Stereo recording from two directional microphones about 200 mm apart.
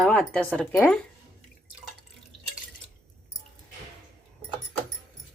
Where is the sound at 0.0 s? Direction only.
5° left (ahead or behind).